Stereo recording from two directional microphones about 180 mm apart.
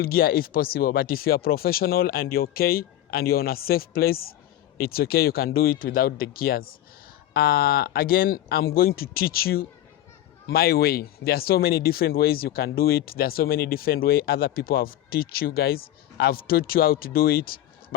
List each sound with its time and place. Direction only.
0.0 s speech: 55° left (ahead or behind)